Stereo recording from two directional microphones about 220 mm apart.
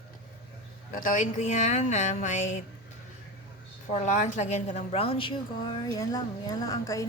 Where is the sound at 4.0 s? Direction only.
35° left (ahead or behind).